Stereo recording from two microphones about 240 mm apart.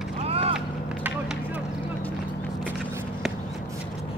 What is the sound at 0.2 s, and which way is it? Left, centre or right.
Vehicle, right.